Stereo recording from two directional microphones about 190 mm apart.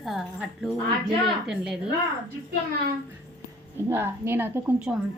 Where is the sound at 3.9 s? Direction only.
10° right (ahead or behind).